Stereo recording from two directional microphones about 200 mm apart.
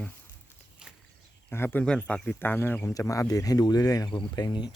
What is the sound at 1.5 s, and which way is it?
Speech, 10° left (ahead or behind).